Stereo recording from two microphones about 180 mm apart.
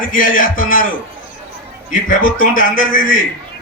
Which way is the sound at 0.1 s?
50° left (ahead or behind).